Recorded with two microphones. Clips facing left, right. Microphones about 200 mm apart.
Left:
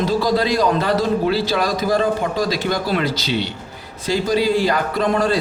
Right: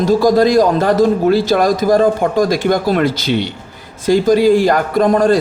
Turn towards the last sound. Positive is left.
turn(degrees=-45)  # may be behind; listen again after turning